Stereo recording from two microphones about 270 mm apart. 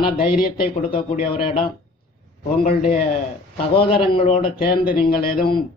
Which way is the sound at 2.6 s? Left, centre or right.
Left.